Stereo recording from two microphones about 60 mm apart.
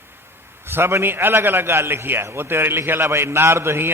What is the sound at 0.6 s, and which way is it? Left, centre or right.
A man's voice, right.